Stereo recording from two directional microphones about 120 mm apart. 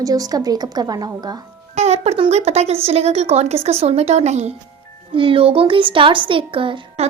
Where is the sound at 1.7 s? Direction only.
65° right (ahead or behind).